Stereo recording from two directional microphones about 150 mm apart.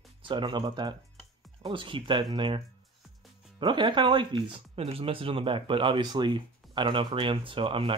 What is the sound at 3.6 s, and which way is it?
Speech, 30° right (ahead or behind).